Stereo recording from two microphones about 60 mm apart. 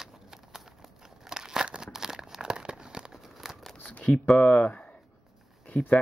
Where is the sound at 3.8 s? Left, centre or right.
Left.